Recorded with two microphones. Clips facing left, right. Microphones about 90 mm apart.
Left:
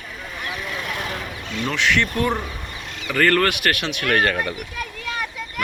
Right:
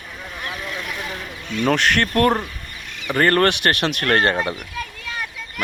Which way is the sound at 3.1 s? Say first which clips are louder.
Right 2 dB; 30° right (ahead or behind).